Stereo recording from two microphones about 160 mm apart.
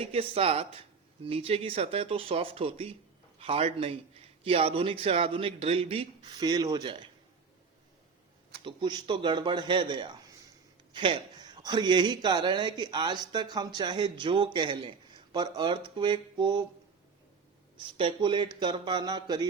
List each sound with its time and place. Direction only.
0.0 s speech: 40° right (ahead or behind)
8.6 s a man's voice: 30° right (ahead or behind)
17.7 s a man's voice: 30° right (ahead or behind)